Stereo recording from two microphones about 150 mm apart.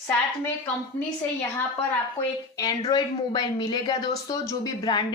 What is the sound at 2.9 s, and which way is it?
A woman's voice, 30° left (ahead or behind).